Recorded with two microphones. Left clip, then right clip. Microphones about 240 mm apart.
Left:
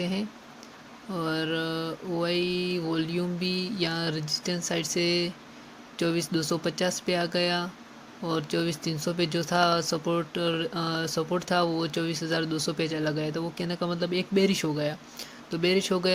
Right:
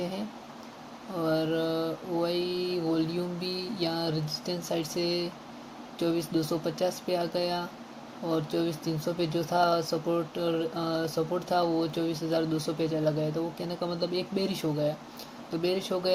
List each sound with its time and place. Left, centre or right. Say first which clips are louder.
1.1 s speech: right 1 dB; left